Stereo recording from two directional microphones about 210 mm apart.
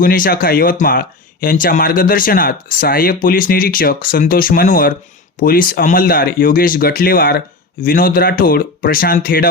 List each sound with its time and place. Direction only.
0.0 s speech: 40° left (ahead or behind)